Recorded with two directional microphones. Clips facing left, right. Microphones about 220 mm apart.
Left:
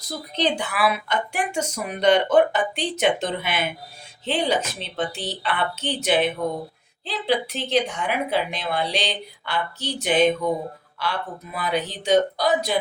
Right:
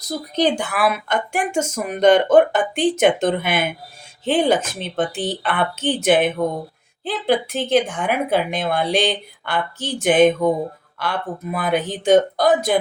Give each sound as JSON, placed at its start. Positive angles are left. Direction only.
{"t": 0.3, "sound": "speech", "side_deg": -45}